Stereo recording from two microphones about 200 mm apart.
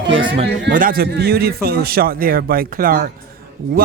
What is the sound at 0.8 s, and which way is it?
A man's voice, 45° right (ahead or behind).